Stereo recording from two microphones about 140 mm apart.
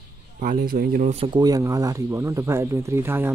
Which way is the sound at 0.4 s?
80° right.